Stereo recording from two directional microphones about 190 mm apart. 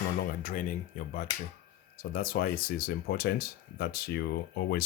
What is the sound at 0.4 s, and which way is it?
Speech, 45° left (ahead or behind).